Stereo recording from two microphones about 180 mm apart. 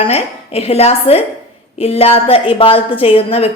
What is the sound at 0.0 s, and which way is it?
A woman's voice, 35° left (ahead or behind).